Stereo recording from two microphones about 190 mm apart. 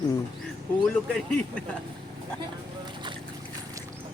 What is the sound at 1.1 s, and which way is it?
Speech, 5° left (ahead or behind).